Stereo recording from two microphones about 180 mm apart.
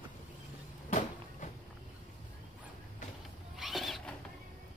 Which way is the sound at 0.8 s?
45° left (ahead or behind).